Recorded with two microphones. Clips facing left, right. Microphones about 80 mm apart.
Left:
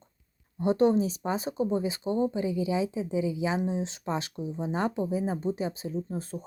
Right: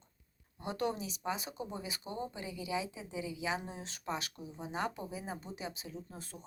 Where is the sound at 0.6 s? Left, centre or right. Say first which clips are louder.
Left 13 dB; left.